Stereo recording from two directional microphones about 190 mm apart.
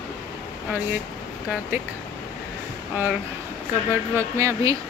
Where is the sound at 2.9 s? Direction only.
10° right (ahead or behind).